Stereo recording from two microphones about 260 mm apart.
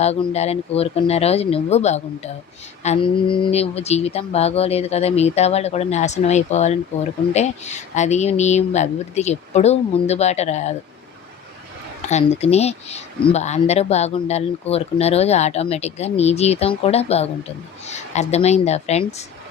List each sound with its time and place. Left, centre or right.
0.0 s speech: left
12.0 s speech: left